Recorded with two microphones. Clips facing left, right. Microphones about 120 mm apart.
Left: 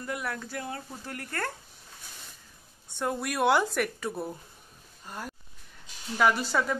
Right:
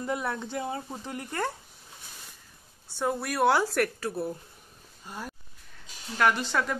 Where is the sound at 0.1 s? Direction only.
25° right (ahead or behind).